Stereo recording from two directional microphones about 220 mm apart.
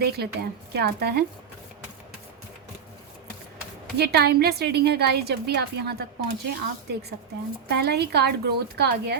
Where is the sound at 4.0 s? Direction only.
45° right (ahead or behind).